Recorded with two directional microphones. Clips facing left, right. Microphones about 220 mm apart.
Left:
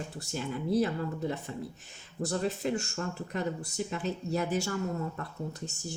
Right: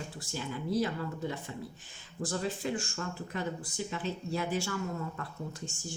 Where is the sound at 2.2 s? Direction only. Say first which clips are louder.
Left 3 dB; 35° left (ahead or behind).